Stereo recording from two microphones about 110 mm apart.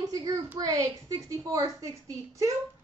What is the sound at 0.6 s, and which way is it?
A woman's voice, 30° right (ahead or behind).